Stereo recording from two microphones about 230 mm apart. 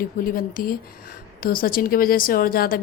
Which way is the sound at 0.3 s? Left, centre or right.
Left.